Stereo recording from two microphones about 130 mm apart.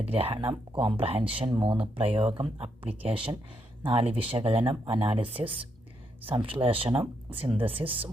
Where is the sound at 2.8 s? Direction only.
10° right (ahead or behind).